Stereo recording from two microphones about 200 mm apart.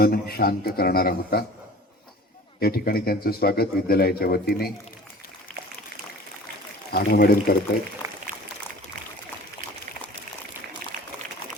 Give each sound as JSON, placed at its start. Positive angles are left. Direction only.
{"t": 0.0, "sound": "speech", "side_deg": 50}
{"t": 2.6, "sound": "speech", "side_deg": 50}
{"t": 6.9, "sound": "speech", "side_deg": 50}
{"t": 8.0, "sound": "pour", "side_deg": -15}
{"t": 10.9, "sound": "a sound", "side_deg": -40}